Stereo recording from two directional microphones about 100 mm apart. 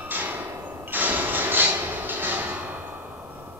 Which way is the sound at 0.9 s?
20° right (ahead or behind).